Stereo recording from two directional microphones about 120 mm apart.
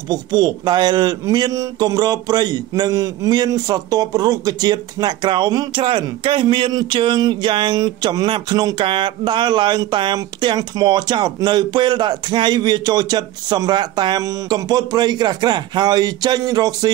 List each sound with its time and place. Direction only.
0.1 s speech: 35° right (ahead or behind)
5.8 s speech: 45° right (ahead or behind)